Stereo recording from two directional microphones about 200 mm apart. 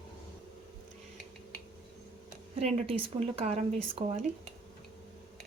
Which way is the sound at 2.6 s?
30° right (ahead or behind).